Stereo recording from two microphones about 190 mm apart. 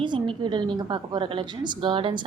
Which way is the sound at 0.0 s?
25° right (ahead or behind).